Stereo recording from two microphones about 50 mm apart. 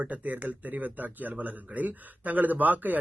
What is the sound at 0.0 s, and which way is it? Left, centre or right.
Speech, right.